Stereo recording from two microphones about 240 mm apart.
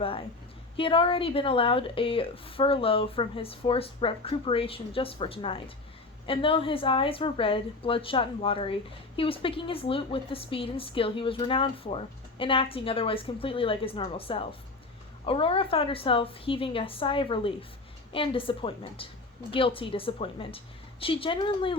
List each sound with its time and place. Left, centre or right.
0.8 s speech: left